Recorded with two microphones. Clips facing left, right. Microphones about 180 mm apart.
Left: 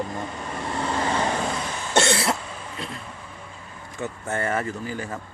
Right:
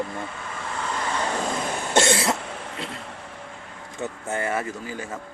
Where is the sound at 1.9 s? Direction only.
20° right (ahead or behind).